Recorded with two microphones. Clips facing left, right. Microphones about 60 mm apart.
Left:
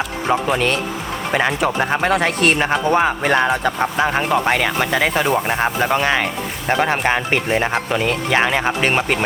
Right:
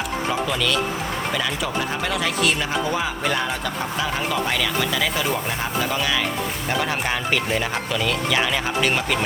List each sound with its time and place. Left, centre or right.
0.3 s speech: left